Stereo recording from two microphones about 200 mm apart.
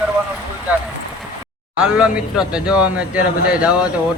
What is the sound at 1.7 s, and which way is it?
Speech, 5° right (ahead or behind).